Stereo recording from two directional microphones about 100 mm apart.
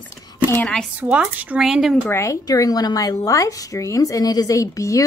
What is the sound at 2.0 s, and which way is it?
A woman's voice, 25° left (ahead or behind).